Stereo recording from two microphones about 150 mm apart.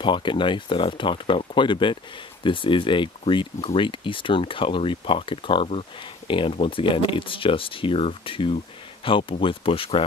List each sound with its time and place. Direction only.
0.0 s speech: 35° left (ahead or behind)